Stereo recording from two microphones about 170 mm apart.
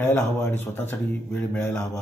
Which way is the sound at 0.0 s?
15° left (ahead or behind).